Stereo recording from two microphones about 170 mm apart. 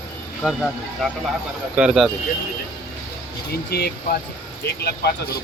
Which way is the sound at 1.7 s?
5° right (ahead or behind).